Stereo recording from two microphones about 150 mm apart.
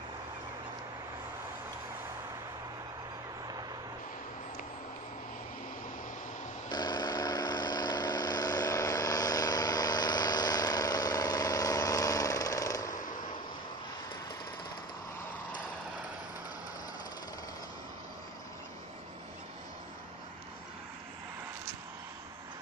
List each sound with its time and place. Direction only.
6.7 s vehicle: 30° left (ahead or behind)